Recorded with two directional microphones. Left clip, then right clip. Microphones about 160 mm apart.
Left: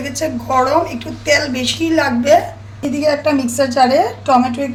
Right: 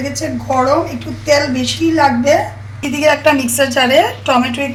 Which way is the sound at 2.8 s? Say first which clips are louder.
Right 3 dB; 5° right (ahead or behind).